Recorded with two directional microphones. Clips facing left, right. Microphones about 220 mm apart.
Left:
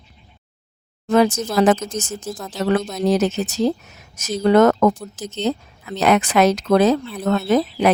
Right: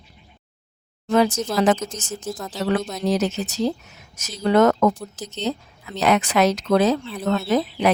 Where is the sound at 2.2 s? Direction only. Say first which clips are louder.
Even; centre (ahead or behind).